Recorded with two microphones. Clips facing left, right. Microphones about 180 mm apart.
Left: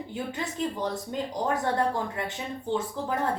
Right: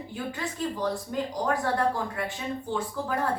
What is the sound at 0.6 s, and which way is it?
Speech, 20° left (ahead or behind).